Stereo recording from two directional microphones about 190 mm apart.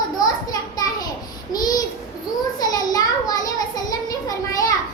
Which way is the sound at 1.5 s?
20° left (ahead or behind).